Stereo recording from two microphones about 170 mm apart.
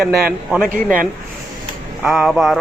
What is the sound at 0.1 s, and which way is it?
Speech, 60° right (ahead or behind).